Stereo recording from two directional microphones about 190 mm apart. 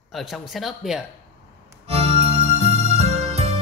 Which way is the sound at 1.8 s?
30° right (ahead or behind).